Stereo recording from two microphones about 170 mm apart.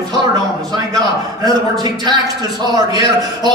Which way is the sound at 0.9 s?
25° right (ahead or behind).